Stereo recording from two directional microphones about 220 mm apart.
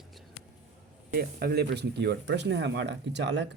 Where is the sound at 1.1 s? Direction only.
45° right (ahead or behind).